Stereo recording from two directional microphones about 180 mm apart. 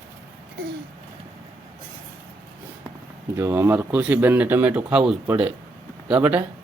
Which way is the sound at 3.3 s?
15° right (ahead or behind).